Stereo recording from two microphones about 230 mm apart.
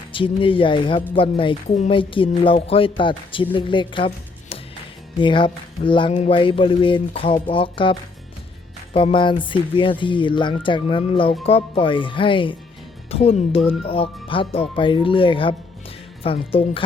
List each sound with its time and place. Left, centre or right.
0.1 s speech: left